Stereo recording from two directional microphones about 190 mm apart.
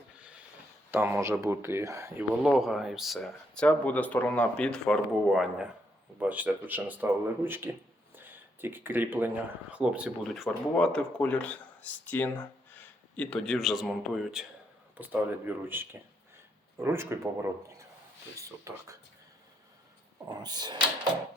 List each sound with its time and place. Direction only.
0.9 s speech: 10° right (ahead or behind)
2.4 s speech: centre (ahead or behind)
20.2 s speech: 20° right (ahead or behind)